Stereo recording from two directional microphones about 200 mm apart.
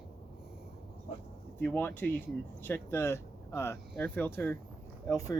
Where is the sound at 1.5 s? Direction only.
10° left (ahead or behind).